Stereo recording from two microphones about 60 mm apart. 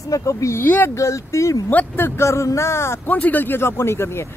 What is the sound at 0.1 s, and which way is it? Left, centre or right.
Speech, left.